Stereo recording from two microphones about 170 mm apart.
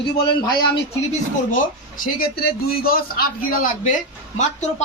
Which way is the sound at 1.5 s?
55° left (ahead or behind).